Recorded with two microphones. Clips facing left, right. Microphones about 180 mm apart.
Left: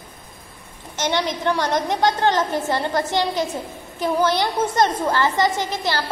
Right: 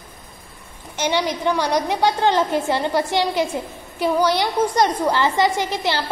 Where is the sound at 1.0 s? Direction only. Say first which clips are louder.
Right 1 dB; 10° right (ahead or behind).